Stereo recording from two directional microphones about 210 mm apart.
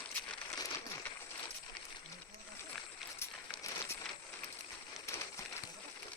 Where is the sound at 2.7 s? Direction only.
Centre (ahead or behind).